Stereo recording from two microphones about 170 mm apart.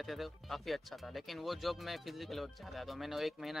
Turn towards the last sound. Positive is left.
turn(degrees=0)  # may be behind; listen again after turning